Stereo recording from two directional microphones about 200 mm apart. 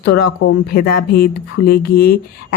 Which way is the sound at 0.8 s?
45° left (ahead or behind).